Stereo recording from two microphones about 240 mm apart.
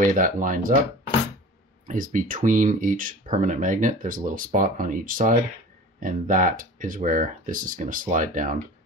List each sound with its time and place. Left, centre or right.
0.0 s speech: right
1.9 s speech: right